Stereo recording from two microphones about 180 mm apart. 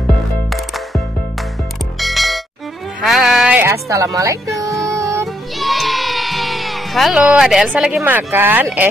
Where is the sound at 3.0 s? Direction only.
Centre (ahead or behind); by 4.7 s 20° right (ahead or behind).